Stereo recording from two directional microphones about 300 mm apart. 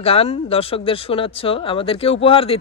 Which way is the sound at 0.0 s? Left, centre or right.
Centre.